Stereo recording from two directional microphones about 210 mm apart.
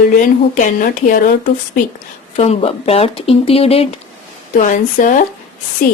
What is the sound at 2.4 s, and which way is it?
Speech, 30° left (ahead or behind).